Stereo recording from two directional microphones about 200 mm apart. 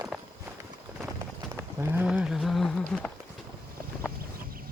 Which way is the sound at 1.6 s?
5° right (ahead or behind).